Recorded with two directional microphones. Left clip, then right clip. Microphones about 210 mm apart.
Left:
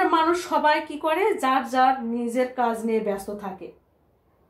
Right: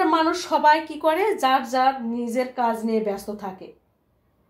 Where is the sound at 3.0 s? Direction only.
55° right (ahead or behind).